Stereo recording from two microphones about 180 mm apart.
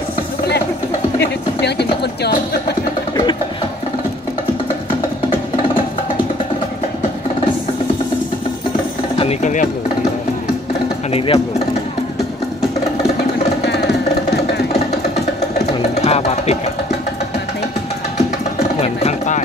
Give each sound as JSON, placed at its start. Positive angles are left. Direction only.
{"t": 1.2, "sound": "speech", "side_deg": 65}
{"t": 9.2, "sound": "speech", "side_deg": 40}
{"t": 11.1, "sound": "speech", "side_deg": 35}
{"t": 13.7, "sound": "music", "side_deg": 70}
{"t": 16.0, "sound": "music", "side_deg": 35}
{"t": 18.8, "sound": "a sound", "side_deg": 40}